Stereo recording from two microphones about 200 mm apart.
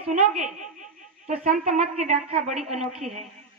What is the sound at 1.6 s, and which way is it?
A woman's voice, 35° right (ahead or behind).